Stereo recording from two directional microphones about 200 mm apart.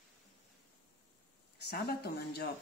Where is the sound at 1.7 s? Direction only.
55° left (ahead or behind).